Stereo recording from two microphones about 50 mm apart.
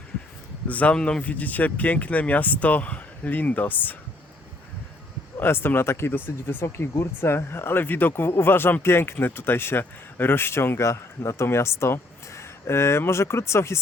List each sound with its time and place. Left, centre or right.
0.7 s speech: left
0.9 s speech: centre
1.2 s speech: left
5.4 s speech: left